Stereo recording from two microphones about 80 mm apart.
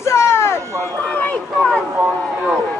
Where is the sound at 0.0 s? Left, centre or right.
Left.